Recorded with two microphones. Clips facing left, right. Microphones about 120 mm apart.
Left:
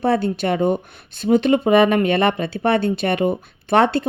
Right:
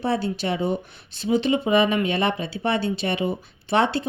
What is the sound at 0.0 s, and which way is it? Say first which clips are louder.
Speech: left 5 dB; 55° left (ahead or behind).